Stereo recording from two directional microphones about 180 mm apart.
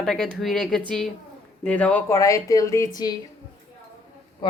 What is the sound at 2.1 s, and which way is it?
Speech, 20° left (ahead or behind).